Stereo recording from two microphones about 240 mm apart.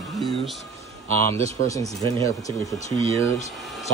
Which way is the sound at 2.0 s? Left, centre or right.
Centre.